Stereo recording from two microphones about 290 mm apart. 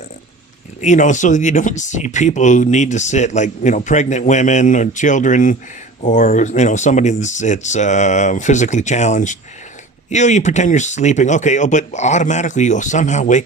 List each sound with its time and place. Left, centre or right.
0.8 s speech: left